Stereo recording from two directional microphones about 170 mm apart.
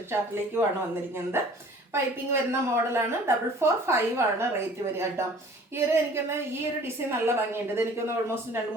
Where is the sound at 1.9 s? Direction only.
15° right (ahead or behind).